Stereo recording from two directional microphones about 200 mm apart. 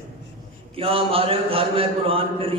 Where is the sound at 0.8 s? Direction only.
30° right (ahead or behind).